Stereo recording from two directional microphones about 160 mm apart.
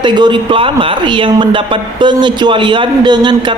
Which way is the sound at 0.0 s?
30° right (ahead or behind).